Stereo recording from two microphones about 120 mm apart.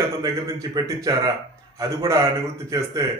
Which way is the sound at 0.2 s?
30° right (ahead or behind).